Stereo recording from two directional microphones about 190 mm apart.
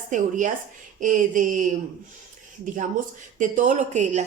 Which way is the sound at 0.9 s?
45° right (ahead or behind).